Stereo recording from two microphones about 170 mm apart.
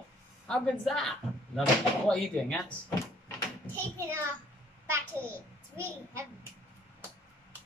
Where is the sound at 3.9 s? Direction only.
15° right (ahead or behind).